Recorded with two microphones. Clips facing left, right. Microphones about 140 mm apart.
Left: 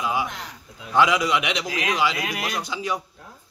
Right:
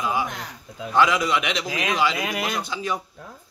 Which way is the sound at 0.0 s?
10° left (ahead or behind).